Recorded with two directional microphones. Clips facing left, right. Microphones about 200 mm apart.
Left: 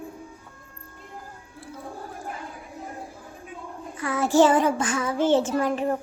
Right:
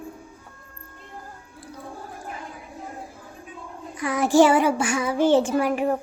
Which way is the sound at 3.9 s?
15° right (ahead or behind).